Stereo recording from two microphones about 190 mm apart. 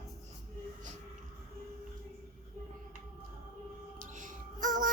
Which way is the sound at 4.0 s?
45° right (ahead or behind).